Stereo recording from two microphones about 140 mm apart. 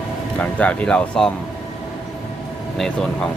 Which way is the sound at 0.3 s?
10° left (ahead or behind).